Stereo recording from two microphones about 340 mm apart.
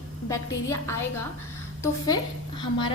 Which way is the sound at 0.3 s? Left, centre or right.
Centre.